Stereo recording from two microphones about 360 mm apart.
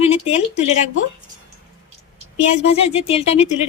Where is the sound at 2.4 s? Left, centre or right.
Centre.